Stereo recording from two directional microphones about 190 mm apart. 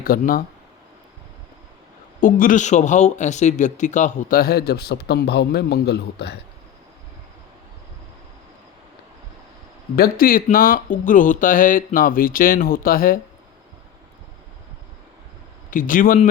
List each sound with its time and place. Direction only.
0.0 s speech: 50° left (ahead or behind)
2.2 s speech: 45° left (ahead or behind); by 6.3 s 60° left (ahead or behind)
9.9 s speech: 50° left (ahead or behind)
15.7 s speech: 45° left (ahead or behind)